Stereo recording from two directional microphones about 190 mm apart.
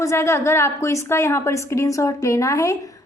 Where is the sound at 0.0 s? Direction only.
15° left (ahead or behind).